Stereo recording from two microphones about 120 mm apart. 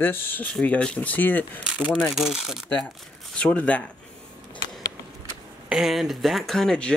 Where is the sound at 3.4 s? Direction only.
10° left (ahead or behind).